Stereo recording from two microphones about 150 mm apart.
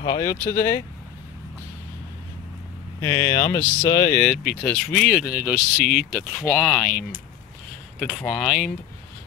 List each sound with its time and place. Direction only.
0.2 s speech: 20° left (ahead or behind)
3.0 s speech: 20° left (ahead or behind)
4.2 s speech: centre (ahead or behind)
5.3 s speech: 5° right (ahead or behind)
6.9 s speech: 70° right (ahead or behind)
8.0 s speech: 5° left (ahead or behind)